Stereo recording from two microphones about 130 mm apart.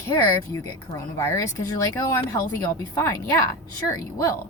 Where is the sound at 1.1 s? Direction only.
20° left (ahead or behind).